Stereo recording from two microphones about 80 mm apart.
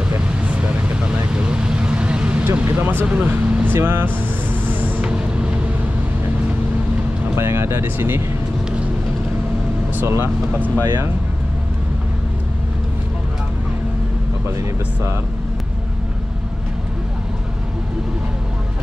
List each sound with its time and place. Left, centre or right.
0.3 s vehicle: centre
7.3 s speech: right
10.0 s speech: right
10.5 s speech: right